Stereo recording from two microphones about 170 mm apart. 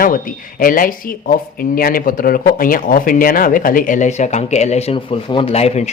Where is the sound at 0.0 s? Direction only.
55° left (ahead or behind).